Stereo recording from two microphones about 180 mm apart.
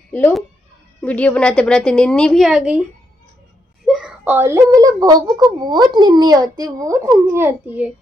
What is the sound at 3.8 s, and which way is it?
A child's voice, centre (ahead or behind).